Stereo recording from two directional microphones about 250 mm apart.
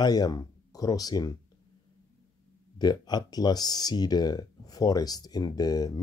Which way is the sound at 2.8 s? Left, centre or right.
Centre.